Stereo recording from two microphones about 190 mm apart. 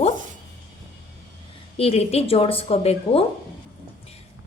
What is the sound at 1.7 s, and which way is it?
A woman's voice, 30° left (ahead or behind).